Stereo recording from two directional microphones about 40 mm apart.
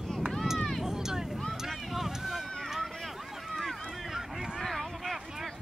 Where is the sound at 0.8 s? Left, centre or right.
Centre.